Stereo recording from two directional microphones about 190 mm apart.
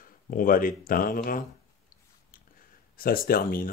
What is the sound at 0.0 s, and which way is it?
Speech, 45° left (ahead or behind).